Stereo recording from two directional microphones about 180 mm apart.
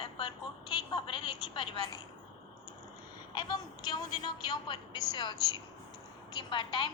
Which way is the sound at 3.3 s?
25° left (ahead or behind).